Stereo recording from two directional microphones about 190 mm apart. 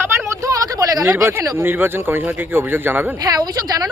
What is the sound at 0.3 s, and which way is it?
Speech, 15° right (ahead or behind).